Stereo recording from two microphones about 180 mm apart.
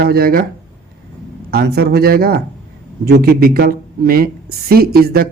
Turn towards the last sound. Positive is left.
turn(degrees=-60)  # may be behind; listen again after turning